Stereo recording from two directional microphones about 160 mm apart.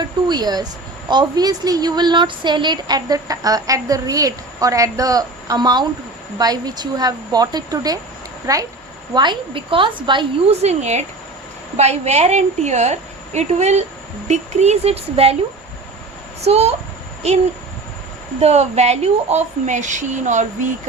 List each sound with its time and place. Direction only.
0.0 s a woman's voice: 25° right (ahead or behind)
10.6 s speech: 45° right (ahead or behind)
16.4 s speech: 40° right (ahead or behind)
18.3 s speech: 45° right (ahead or behind)